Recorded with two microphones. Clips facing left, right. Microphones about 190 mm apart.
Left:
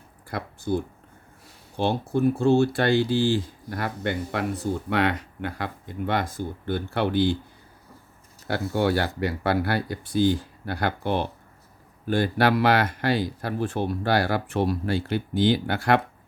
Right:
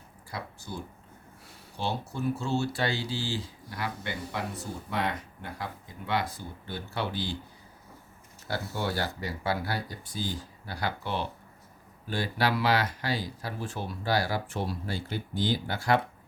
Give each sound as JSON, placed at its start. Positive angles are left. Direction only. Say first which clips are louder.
{"t": 0.3, "sound": "speech", "louder": "left 12 dB", "side_deg": 60}
{"t": 8.4, "sound": "speech", "louder": "left 9 dB", "side_deg": 65}